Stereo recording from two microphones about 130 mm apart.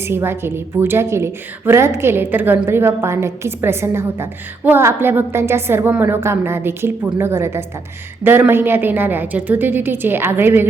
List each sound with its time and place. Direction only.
0.0 s a woman's voice: 20° right (ahead or behind)